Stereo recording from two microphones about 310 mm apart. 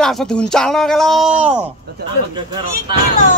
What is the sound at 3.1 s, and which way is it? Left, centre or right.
Speech, left.